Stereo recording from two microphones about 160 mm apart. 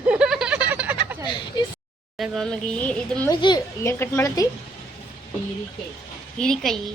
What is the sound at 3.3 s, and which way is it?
A child's voice, 25° left (ahead or behind).